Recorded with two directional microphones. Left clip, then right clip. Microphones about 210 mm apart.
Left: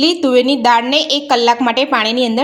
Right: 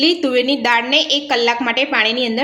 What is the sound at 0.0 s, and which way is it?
A woman's voice, 30° left (ahead or behind).